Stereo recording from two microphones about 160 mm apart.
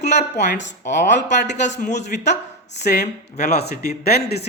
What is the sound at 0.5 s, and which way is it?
Speech, 90° left.